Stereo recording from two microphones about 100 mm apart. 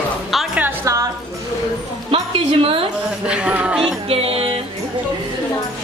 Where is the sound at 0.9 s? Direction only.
30° right (ahead or behind).